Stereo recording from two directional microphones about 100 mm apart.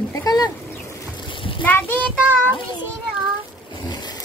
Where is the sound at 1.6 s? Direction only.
20° left (ahead or behind).